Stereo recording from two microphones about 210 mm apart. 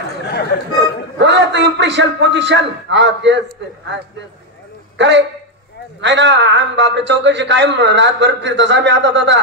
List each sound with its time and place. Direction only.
0.3 s chatter: 50° left (ahead or behind)
1.1 s a man's voice: 55° right (ahead or behind)
4.9 s a man's voice: 55° right (ahead or behind)